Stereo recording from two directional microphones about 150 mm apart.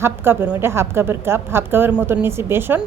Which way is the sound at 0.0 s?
15° right (ahead or behind).